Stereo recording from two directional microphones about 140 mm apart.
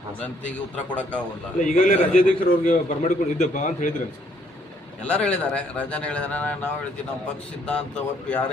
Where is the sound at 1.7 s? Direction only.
75° left (ahead or behind).